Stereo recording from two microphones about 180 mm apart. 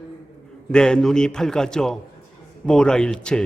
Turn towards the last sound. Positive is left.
turn(degrees=5)  # may be behind; listen again after turning